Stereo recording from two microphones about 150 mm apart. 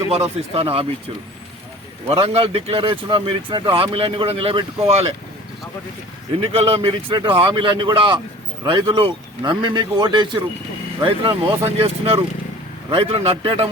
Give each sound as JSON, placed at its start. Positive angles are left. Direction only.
{"t": 0.1, "sound": "speech", "side_deg": -45}
{"t": 2.0, "sound": "speech", "side_deg": -40}
{"t": 6.5, "sound": "speech", "side_deg": -40}